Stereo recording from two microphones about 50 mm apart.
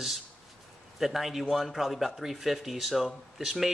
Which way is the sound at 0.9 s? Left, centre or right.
Centre.